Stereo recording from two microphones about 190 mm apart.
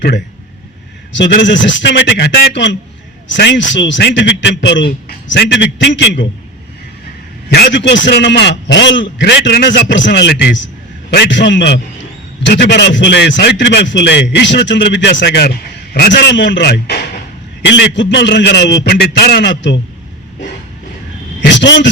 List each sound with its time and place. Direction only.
1.1 s a man's voice: 70° left (ahead or behind)
7.5 s a man's voice: 65° left (ahead or behind)
21.4 s a sound: 70° left (ahead or behind)